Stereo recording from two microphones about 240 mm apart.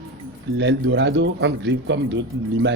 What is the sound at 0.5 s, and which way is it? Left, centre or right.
Speech, right.